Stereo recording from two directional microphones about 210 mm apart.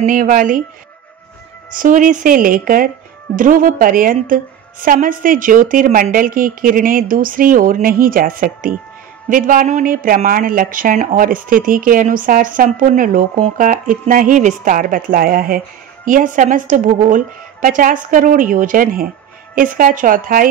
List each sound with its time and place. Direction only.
0.0 s speech: 40° right (ahead or behind)
1.8 s speech: 35° right (ahead or behind)